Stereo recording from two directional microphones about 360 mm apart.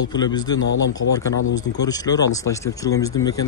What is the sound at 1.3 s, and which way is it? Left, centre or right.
Speech, left.